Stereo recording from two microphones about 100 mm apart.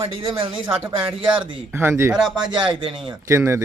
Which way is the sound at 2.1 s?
5° right (ahead or behind).